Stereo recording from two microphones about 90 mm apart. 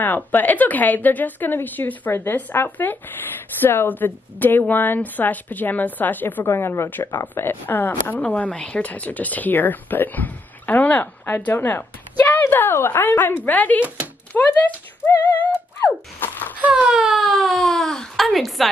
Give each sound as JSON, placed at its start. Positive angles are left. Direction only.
{"t": 0.0, "sound": "a woman's voice", "side_deg": 20}
{"t": 15.3, "sound": "a sound", "side_deg": 20}
{"t": 16.6, "sound": "speech", "side_deg": -5}